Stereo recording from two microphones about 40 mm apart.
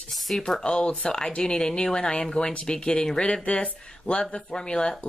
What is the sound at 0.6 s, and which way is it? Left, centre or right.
Speech, left.